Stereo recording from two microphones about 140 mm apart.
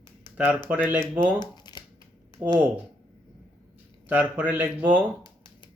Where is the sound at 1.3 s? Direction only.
30° left (ahead or behind).